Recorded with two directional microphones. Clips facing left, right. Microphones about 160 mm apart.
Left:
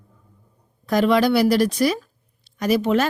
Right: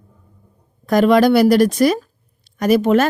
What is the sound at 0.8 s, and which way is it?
A woman's voice, 50° right (ahead or behind).